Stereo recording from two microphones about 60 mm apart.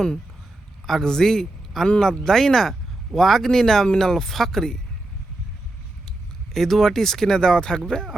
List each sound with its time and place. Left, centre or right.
0.9 s a man's voice: centre
6.1 s speech: centre